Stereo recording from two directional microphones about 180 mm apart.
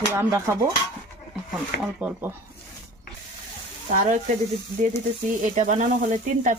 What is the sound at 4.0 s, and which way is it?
Speech, 40° right (ahead or behind).